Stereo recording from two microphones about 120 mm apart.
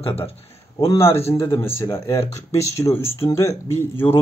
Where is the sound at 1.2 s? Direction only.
20° left (ahead or behind).